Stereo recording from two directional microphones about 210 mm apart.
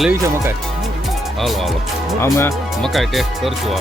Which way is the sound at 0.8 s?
Centre (ahead or behind).